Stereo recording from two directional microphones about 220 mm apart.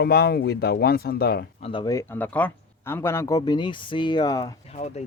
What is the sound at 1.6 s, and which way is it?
Speech, 20° left (ahead or behind).